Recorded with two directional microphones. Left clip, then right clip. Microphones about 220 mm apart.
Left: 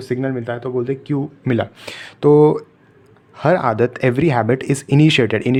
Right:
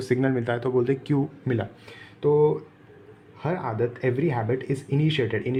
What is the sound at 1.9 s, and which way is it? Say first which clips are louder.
Speech: left 10 dB; 45° left (ahead or behind).